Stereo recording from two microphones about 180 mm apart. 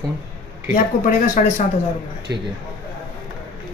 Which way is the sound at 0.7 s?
50° left (ahead or behind).